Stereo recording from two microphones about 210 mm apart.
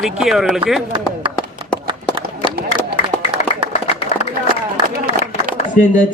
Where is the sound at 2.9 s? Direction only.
25° left (ahead or behind).